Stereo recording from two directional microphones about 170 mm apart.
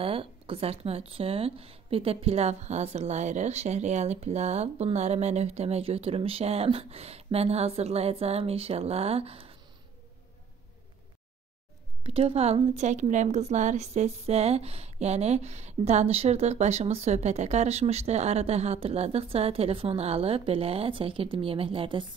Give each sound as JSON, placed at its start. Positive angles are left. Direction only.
{"t": 0.0, "sound": "a woman's voice", "side_deg": -30}
{"t": 12.0, "sound": "a woman's voice", "side_deg": -35}